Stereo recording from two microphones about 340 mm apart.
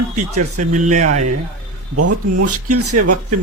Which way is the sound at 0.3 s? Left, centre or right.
Right.